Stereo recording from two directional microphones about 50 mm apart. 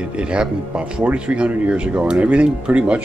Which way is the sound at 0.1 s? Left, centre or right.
Right.